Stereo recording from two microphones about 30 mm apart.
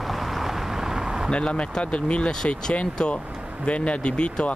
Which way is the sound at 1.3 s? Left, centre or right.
Left.